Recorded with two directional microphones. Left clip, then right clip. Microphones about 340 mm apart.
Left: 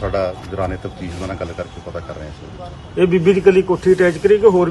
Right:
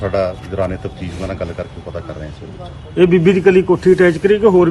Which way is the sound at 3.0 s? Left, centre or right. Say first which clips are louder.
Right 2 dB; right.